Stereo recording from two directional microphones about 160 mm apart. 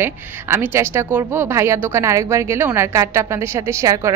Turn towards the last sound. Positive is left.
turn(degrees=-20)  # may be behind; listen again after turning